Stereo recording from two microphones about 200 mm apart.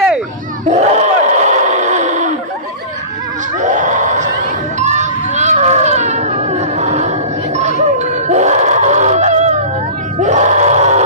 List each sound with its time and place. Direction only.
0.6 s a sound: 35° right (ahead or behind)
3.6 s crowd: 40° right (ahead or behind)
7.5 s music: 35° right (ahead or behind)
10.2 s crowd: 35° right (ahead or behind)